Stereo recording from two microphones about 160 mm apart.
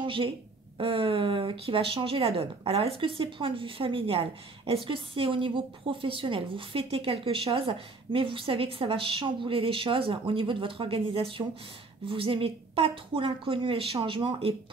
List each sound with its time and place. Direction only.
0.0 s a woman's voice: 35° right (ahead or behind)